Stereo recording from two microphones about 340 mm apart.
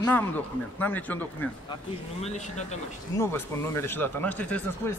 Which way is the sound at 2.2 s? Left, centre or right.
Centre.